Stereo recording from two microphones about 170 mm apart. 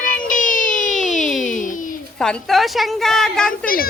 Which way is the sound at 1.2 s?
Centre (ahead or behind).